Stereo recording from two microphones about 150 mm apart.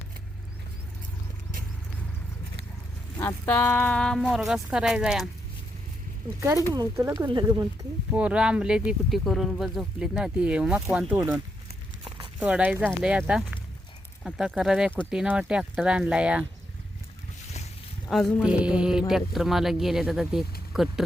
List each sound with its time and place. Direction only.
3.2 s speech: 20° left (ahead or behind); by 5.3 s 5° right (ahead or behind)
6.7 s speech: 20° right (ahead or behind)
8.1 s speech: 5° right (ahead or behind)
12.4 s speech: 10° right (ahead or behind)
18.1 s speech: 5° left (ahead or behind)
18.4 s speech: 5° right (ahead or behind)